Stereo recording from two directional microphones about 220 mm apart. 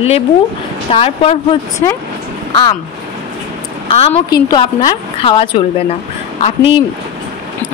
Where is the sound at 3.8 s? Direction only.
25° left (ahead or behind).